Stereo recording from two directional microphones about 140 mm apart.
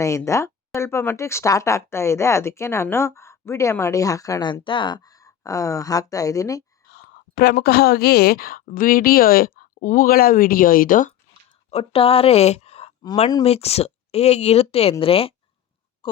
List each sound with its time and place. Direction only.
0.3 s speech: 20° left (ahead or behind)
7.3 s speech: 90° left; by 11.1 s 75° left (ahead or behind)
11.7 s a woman's voice: 45° left (ahead or behind)